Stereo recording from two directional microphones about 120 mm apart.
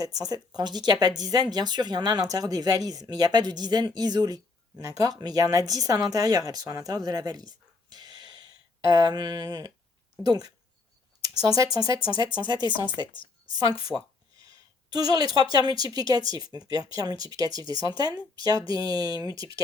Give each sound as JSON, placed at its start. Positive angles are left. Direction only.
{"t": 0.0, "sound": "speech", "side_deg": -30}
{"t": 13.9, "sound": "speech", "side_deg": -5}
{"t": 14.8, "sound": "speech", "side_deg": -35}